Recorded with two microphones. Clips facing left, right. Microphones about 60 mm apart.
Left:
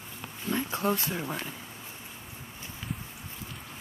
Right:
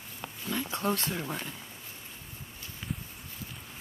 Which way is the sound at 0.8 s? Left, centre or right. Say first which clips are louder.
Left 2 dB; centre.